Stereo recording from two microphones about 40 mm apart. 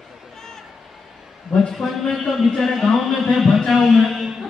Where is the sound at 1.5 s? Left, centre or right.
Centre.